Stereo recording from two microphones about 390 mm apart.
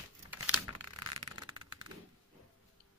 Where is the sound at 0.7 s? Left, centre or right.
Right.